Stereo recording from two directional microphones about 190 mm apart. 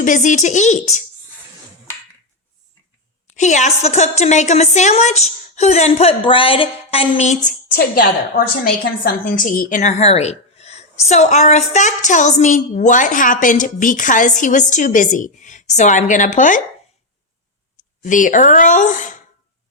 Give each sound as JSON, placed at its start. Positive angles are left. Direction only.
{"t": 0.0, "sound": "a woman's voice", "side_deg": 40}
{"t": 3.2, "sound": "a woman's voice", "side_deg": 40}
{"t": 18.0, "sound": "a woman's voice", "side_deg": 45}